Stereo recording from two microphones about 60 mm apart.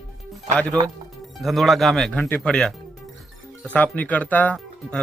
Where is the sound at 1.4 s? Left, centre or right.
Centre.